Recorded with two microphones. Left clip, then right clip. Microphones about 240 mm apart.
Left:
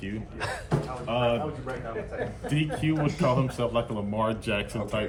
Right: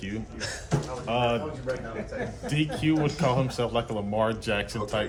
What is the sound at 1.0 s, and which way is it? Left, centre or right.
Speech, centre.